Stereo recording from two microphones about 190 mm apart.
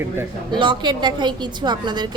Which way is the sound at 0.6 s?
25° right (ahead or behind).